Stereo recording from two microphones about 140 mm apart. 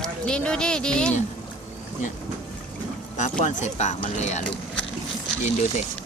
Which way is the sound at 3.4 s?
60° left (ahead or behind).